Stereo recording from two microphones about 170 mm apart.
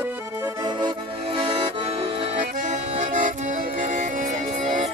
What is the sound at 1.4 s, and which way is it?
Accordion, 35° right (ahead or behind).